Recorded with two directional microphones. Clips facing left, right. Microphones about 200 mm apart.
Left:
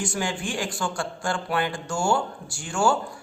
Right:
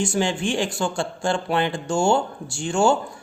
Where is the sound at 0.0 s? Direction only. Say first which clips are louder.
Right 6 dB; 25° right (ahead or behind).